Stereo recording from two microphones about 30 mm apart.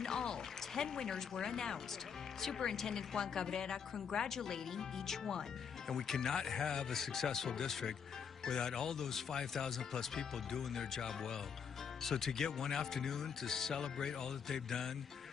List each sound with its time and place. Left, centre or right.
0.0 s speech: centre